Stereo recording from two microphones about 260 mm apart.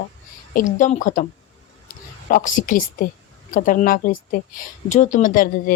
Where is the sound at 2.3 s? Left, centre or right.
Left.